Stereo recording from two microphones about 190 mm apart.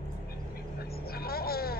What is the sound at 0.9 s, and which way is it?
Speech, 55° left (ahead or behind).